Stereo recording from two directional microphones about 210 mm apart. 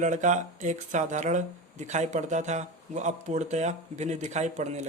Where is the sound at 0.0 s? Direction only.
35° right (ahead or behind).